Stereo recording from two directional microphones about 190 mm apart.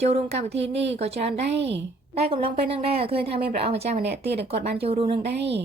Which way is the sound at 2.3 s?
30° right (ahead or behind).